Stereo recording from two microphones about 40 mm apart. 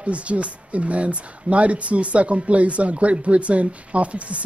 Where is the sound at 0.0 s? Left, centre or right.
Right.